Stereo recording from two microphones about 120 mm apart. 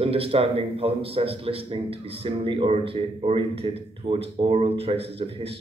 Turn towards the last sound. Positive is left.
turn(degrees=-55)  # may be behind; listen again after turning